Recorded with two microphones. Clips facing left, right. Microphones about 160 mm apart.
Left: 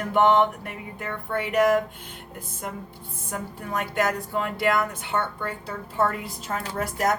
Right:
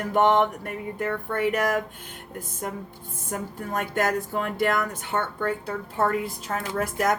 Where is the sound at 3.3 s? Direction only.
45° right (ahead or behind).